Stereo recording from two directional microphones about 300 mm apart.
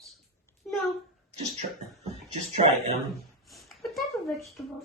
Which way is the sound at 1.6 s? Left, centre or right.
Right.